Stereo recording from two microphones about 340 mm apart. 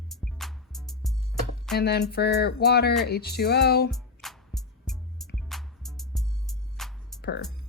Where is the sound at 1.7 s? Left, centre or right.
Left.